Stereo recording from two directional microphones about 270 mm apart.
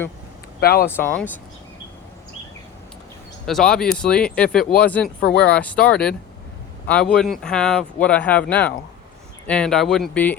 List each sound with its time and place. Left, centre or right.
0.6 s speech: left
0.9 s speech: centre
3.4 s speech: centre